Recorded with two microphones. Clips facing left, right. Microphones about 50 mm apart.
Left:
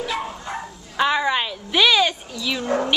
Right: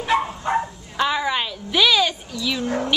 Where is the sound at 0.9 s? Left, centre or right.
Centre.